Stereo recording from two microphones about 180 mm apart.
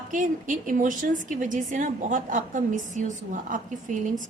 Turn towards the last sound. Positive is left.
turn(degrees=-45)  # may be behind; listen again after turning